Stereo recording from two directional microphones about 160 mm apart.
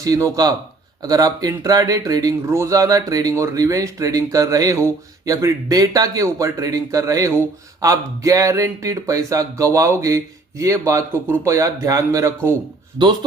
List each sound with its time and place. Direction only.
0.0 s speech: 20° right (ahead or behind)